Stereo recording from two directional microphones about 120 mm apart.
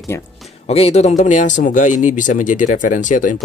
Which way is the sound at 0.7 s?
60° left (ahead or behind).